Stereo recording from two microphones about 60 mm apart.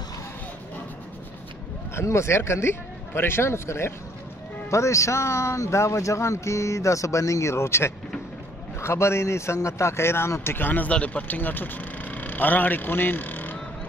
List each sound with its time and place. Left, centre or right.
2.0 s speech: left
4.6 s a man's voice: left